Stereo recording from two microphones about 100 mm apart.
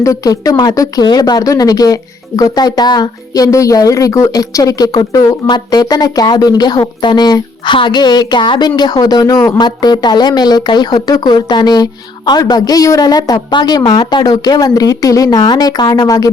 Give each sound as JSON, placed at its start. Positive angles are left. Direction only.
{"t": 0.0, "sound": "speech", "side_deg": 35}